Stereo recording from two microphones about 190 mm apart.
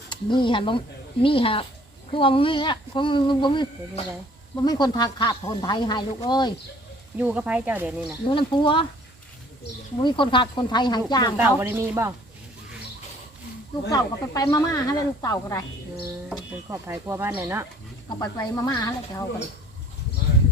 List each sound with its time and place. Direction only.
0.1 s speech: 25° left (ahead or behind)
7.2 s speech: 5° right (ahead or behind)
8.3 s speech: 25° left (ahead or behind)
10.0 s speech: 25° left (ahead or behind)
11.3 s speech: 10° right (ahead or behind)
13.9 s speech: 20° left (ahead or behind)
16.7 s speech: 15° right (ahead or behind)
18.2 s speech: 20° left (ahead or behind)